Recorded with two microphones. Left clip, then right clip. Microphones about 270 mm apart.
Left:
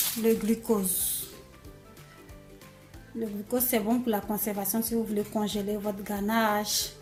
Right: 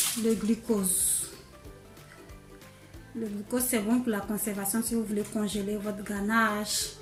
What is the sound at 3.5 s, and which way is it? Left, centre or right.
Speech, left.